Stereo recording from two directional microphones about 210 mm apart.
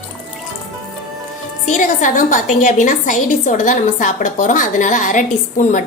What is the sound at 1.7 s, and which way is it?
A woman's voice, 40° left (ahead or behind).